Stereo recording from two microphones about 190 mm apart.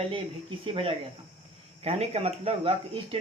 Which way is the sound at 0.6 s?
30° right (ahead or behind).